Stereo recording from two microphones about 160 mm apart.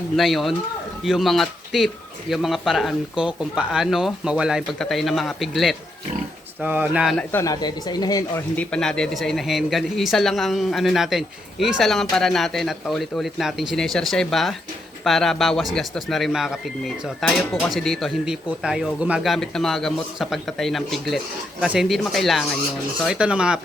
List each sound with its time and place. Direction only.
0.2 s speech: centre (ahead or behind)
7.3 s speech: 15° left (ahead or behind)
7.5 s speech: 25° left (ahead or behind)
8.5 s speech: 5° left (ahead or behind)